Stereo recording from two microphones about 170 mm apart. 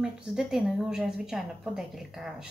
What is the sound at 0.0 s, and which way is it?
A woman's voice, 5° right (ahead or behind).